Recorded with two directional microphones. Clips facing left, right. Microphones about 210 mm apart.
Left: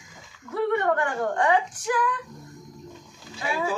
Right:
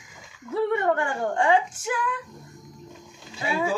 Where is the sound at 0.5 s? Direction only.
25° right (ahead or behind).